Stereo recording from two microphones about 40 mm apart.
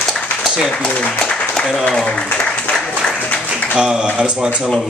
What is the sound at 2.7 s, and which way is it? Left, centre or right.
Applause, left.